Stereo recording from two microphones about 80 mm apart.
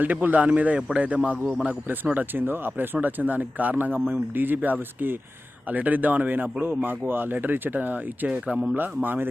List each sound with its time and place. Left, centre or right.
0.0 s speech: right